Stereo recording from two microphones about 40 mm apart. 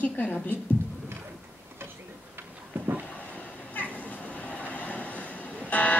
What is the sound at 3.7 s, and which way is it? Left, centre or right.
Train, left.